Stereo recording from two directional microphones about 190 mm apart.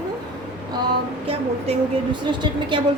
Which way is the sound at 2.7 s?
25° right (ahead or behind).